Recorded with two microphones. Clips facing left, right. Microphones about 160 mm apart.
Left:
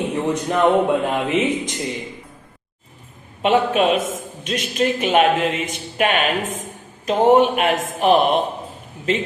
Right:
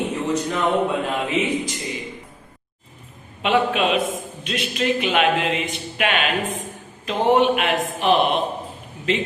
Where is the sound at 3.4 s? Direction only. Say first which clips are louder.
Left 3 dB; 45° left (ahead or behind).